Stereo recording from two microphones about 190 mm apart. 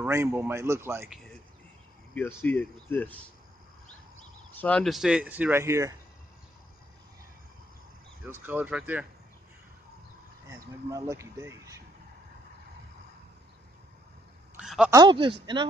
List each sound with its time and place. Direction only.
0.0 s speech: 15° right (ahead or behind)
1.0 s speech: centre (ahead or behind)
4.6 s speech: 5° left (ahead or behind); by 5.9 s 15° right (ahead or behind)
8.3 s speech: 10° right (ahead or behind)
10.5 s speech: 15° right (ahead or behind)
14.6 s a sound: 5° right (ahead or behind)
14.9 s speech: 20° right (ahead or behind)